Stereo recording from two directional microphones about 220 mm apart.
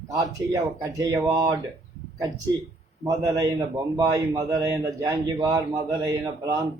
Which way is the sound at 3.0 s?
15° right (ahead or behind).